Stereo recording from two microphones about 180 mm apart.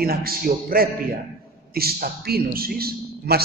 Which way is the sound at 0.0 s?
55° right (ahead or behind).